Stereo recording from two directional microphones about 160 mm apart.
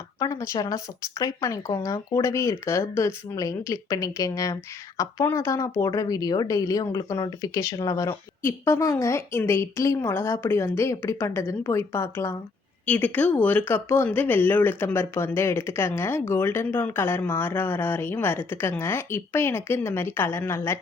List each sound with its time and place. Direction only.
0.2 s a woman's voice: 20° left (ahead or behind)